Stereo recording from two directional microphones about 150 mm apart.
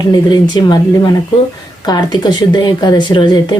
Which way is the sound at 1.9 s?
30° left (ahead or behind).